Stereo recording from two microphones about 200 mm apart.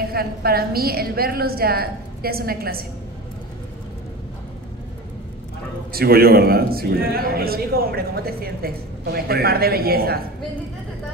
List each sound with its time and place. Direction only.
0.0 s a man's voice: 50° right (ahead or behind)
5.9 s a man's voice: 50° right (ahead or behind)